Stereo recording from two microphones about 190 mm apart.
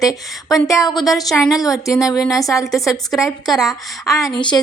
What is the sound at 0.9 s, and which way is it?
Speech, centre (ahead or behind).